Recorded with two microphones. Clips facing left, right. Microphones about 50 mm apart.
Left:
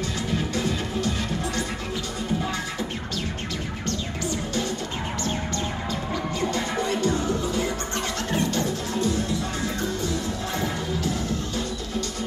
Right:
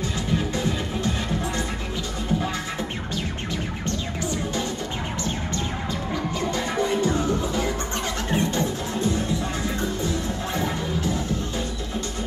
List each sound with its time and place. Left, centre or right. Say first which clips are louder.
6.5 s music: right 2 dB; right
8.3 s music: right 2 dB; right